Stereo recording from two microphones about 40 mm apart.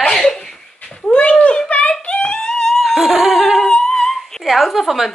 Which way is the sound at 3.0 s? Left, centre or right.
Centre.